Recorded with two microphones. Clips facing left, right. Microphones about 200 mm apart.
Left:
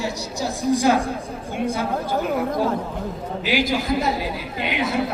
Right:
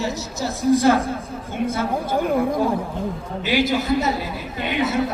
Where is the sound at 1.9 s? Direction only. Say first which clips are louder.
Right 2 dB; 10° right (ahead or behind).